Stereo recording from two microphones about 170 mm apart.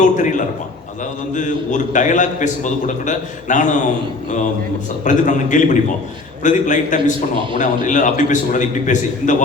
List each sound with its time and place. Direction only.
0.0 s a man's voice: 50° left (ahead or behind)
5.0 s a man's voice: 45° left (ahead or behind)